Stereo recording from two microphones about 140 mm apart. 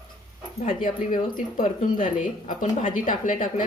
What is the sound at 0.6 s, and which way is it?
A woman's voice, 75° left (ahead or behind).